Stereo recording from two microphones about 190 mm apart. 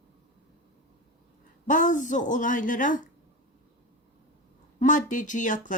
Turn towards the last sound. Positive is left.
turn(degrees=40)  # may be behind; listen again after turning